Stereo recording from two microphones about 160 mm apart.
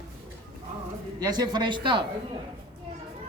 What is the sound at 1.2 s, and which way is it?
Speech, 25° right (ahead or behind).